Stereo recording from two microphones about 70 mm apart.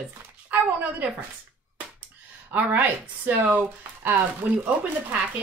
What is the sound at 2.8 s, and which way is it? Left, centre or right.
Speech, right.